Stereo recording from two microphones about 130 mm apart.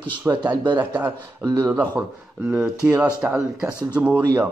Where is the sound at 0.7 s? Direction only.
15° right (ahead or behind).